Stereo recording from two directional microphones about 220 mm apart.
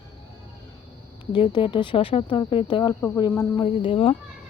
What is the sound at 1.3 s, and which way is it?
Speech, 20° left (ahead or behind).